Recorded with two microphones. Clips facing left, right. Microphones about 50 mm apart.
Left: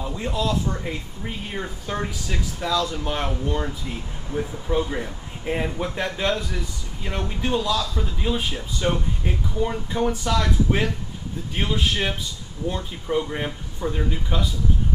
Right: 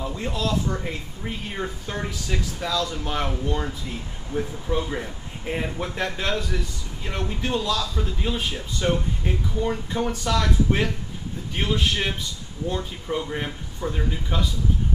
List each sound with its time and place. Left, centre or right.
0.0 s speech: centre
0.4 s speech: centre
0.9 s speech: centre